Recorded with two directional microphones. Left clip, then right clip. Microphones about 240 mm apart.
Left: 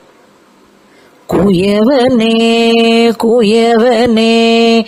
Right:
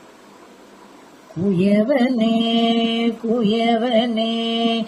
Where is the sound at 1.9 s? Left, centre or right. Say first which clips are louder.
Left 9 dB; left.